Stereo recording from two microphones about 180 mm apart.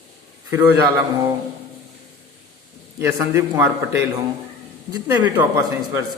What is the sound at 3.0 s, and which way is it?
A man's voice, 15° right (ahead or behind).